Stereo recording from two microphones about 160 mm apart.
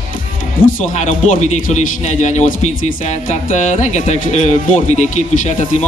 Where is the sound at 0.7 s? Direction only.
55° left (ahead or behind).